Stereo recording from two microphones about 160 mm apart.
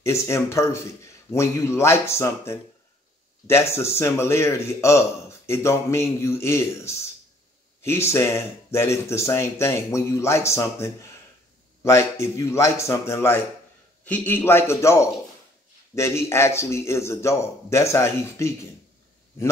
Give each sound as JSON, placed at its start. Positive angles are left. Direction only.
{"t": 0.0, "sound": "speech", "side_deg": 15}
{"t": 3.7, "sound": "speech", "side_deg": 15}